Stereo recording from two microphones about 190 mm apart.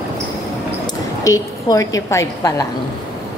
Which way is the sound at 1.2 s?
15° left (ahead or behind).